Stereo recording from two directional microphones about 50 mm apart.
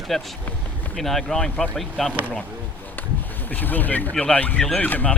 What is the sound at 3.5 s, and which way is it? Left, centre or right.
Speech, left.